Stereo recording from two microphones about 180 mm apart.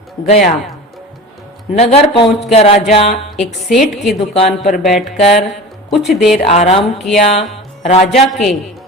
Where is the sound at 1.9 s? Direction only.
35° left (ahead or behind).